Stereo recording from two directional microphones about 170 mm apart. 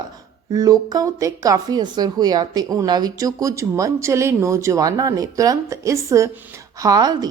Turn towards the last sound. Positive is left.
turn(degrees=-25)  # may be behind; listen again after turning